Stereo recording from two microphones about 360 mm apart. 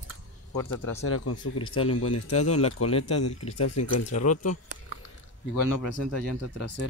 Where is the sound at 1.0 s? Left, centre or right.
Left.